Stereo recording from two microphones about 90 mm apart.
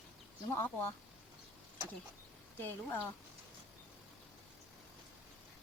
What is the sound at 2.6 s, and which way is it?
Speech, 20° left (ahead or behind).